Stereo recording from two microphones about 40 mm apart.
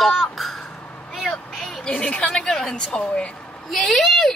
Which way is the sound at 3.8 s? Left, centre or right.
Centre.